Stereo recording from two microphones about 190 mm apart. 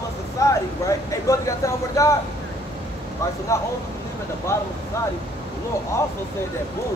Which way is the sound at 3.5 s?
15° left (ahead or behind).